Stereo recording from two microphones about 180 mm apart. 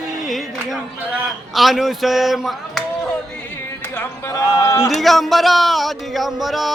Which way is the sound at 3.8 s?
15° left (ahead or behind).